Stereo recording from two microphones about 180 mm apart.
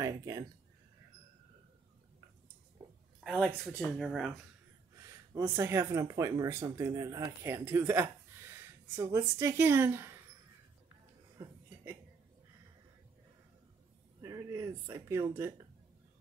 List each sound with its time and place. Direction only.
0.0 s speech: 20° right (ahead or behind)
3.3 s speech: 5° left (ahead or behind)
5.4 s speech: 15° right (ahead or behind)
11.3 s a sound: 15° right (ahead or behind)
14.2 s speech: 20° right (ahead or behind)